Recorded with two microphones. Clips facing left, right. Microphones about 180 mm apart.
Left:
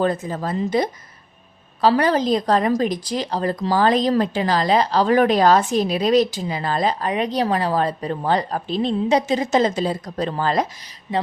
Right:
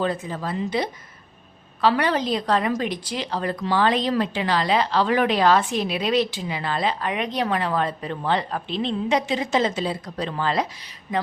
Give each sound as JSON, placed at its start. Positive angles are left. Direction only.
{"t": 0.0, "sound": "a woman's voice", "side_deg": 45}